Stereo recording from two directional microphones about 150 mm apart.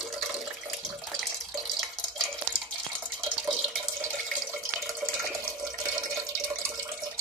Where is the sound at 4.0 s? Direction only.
20° right (ahead or behind).